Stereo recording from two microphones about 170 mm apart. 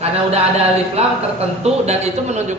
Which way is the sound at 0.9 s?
40° right (ahead or behind).